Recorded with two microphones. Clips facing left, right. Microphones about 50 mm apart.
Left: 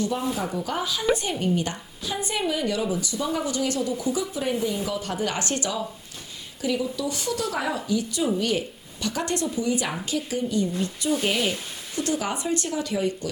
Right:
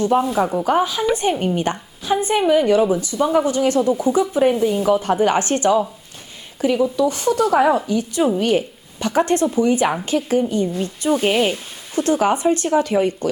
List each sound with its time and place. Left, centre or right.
0.0 s a woman's voice: right